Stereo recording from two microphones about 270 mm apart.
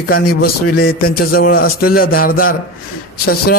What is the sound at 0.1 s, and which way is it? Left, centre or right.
A man's voice, left.